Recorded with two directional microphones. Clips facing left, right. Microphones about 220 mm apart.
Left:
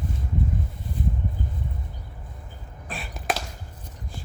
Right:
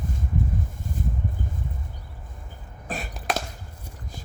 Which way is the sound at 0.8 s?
45° right (ahead or behind).